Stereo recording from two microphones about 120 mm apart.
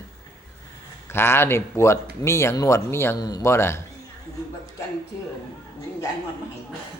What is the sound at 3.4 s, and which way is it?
Speech, 20° left (ahead or behind).